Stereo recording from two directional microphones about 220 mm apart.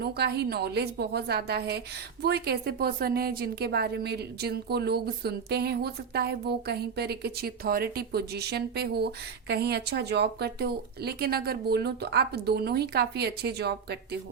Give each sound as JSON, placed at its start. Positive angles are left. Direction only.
{"t": 0.0, "sound": "a woman's voice", "side_deg": -45}